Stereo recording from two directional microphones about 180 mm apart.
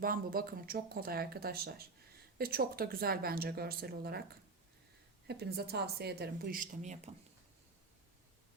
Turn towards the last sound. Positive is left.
turn(degrees=-40)  # may be behind; listen again after turning